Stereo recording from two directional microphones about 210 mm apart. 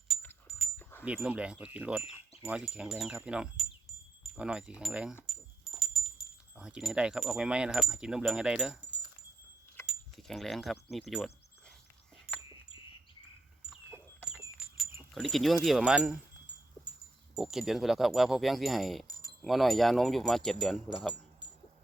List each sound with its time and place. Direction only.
0.8 s wind chime: 10° left (ahead or behind)
1.0 s wind chime: 5° right (ahead or behind)
5.2 s keys jangling: centre (ahead or behind)
5.8 s wind chime: centre (ahead or behind)
9.8 s a sound: centre (ahead or behind)
10.9 s wind chime: centre (ahead or behind)
14.3 s a sound: 5° right (ahead or behind)
15.1 s wind chime: centre (ahead or behind)
17.3 s wind chime: centre (ahead or behind)
19.0 s keys jangling: 15° left (ahead or behind)
19.4 s wind chime: centre (ahead or behind)